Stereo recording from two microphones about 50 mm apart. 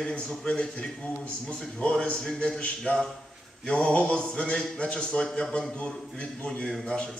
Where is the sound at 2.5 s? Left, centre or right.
Left.